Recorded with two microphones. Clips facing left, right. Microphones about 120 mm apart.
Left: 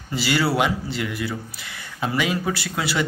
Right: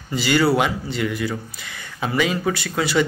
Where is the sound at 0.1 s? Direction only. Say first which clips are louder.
Right 4 dB; 5° left (ahead or behind).